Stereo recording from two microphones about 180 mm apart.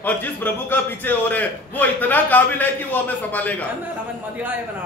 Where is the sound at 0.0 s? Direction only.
10° left (ahead or behind).